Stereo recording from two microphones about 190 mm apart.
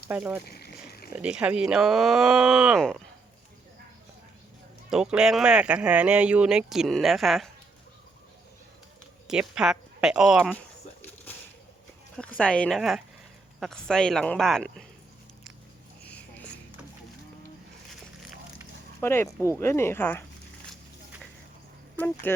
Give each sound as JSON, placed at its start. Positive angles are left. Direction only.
{"t": 0.1, "sound": "speech", "side_deg": -10}
{"t": 0.4, "sound": "a sound", "side_deg": 55}
{"t": 1.1, "sound": "speech", "side_deg": -5}
{"t": 4.9, "sound": "speech", "side_deg": -5}
{"t": 9.2, "sound": "speech", "side_deg": -5}
{"t": 12.1, "sound": "speech", "side_deg": 5}
{"t": 16.0, "sound": "a sound", "side_deg": 5}
{"t": 18.9, "sound": "speech", "side_deg": 10}
{"t": 22.0, "sound": "speech", "side_deg": 10}